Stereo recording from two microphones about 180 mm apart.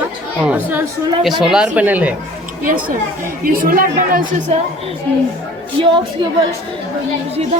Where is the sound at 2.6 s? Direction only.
50° right (ahead or behind).